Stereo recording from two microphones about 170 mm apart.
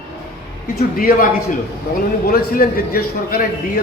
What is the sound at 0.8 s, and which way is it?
A man's voice, 55° left (ahead or behind).